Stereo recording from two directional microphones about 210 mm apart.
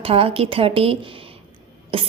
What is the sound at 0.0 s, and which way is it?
A woman's voice, 25° right (ahead or behind).